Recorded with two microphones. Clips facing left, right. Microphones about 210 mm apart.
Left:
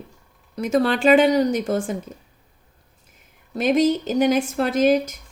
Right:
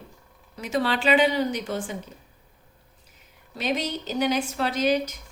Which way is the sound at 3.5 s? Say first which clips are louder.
Left 10 dB; 50° left (ahead or behind).